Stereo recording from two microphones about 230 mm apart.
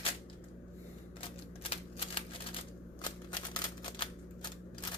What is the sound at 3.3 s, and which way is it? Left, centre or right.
Typewriter, centre.